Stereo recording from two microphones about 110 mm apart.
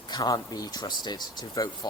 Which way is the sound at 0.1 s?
40° left (ahead or behind).